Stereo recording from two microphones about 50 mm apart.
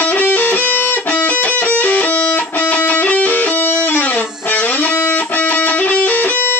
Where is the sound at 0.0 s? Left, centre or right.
Left.